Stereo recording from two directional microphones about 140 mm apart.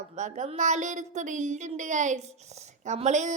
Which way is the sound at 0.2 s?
60° right (ahead or behind).